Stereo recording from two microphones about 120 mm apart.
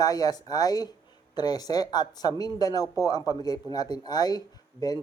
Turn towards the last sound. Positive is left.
turn(degrees=35)  # may be behind; listen again after turning